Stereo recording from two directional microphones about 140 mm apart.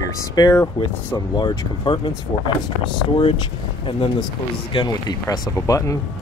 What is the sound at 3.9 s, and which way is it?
Speech, 35° left (ahead or behind).